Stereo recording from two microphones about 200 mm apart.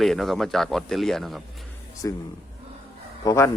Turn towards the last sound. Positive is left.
turn(degrees=15)  # may be behind; listen again after turning